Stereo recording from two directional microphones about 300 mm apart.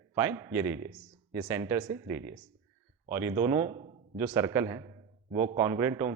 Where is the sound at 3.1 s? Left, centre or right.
Centre.